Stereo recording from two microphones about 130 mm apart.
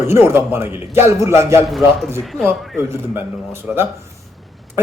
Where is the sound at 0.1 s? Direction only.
20° right (ahead or behind).